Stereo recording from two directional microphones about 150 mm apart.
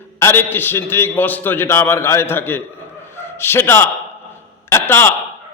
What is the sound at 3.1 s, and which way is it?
Dog, 15° left (ahead or behind).